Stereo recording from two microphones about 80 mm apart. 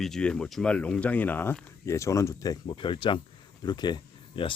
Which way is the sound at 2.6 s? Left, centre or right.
Left.